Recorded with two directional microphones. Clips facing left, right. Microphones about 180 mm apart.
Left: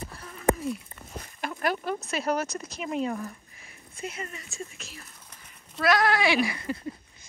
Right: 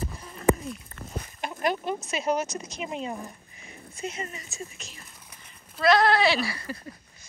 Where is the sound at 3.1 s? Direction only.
20° right (ahead or behind).